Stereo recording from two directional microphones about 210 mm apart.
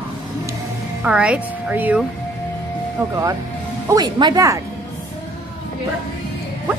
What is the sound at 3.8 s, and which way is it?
Speech, 20° right (ahead or behind).